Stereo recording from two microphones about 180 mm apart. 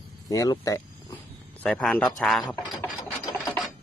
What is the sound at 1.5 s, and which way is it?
Speech, 5° left (ahead or behind).